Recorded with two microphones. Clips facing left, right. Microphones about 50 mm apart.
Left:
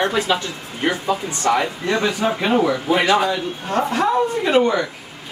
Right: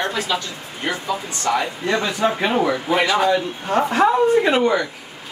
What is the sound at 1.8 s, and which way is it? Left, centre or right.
Speech, centre.